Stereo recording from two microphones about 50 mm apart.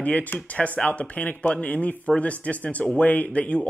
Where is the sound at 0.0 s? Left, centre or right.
Left.